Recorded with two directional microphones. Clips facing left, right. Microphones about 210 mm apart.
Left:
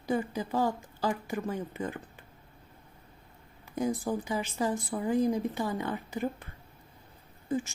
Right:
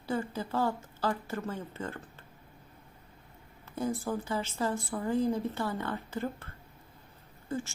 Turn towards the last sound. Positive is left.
turn(degrees=15)  # may be behind; listen again after turning